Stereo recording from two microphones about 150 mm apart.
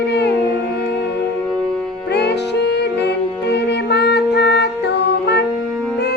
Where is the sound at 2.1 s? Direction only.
90° left.